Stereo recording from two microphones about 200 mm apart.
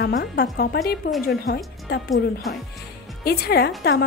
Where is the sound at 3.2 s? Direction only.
50° left (ahead or behind).